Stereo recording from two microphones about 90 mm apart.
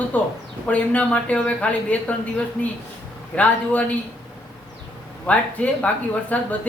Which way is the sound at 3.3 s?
15° left (ahead or behind).